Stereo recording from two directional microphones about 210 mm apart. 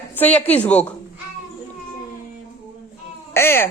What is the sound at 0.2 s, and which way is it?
Speech, 5° left (ahead or behind).